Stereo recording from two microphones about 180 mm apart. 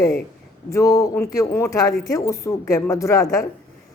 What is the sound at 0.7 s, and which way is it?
Speech, 15° left (ahead or behind).